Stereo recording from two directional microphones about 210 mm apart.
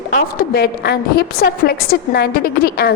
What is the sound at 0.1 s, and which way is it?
A woman's voice, 45° left (ahead or behind).